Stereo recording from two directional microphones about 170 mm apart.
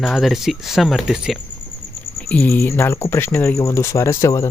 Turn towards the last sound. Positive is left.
turn(degrees=15)  # may be behind; listen again after turning